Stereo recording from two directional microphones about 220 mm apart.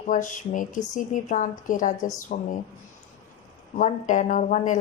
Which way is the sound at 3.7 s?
35° left (ahead or behind).